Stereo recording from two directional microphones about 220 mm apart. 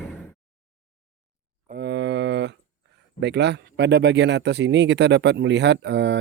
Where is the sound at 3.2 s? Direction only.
50° right (ahead or behind).